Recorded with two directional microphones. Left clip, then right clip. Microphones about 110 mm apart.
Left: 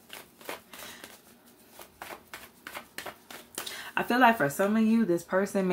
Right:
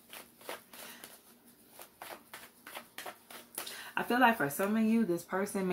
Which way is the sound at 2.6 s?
10° left (ahead or behind).